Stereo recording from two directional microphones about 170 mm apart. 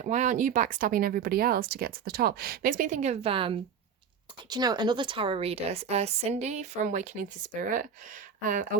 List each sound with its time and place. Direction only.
0.0 s a woman's voice: 45° right (ahead or behind)